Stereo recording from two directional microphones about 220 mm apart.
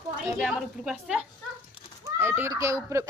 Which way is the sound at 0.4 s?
Centre (ahead or behind).